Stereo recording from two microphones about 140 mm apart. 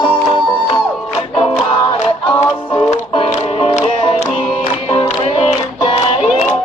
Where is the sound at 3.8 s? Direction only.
35° left (ahead or behind).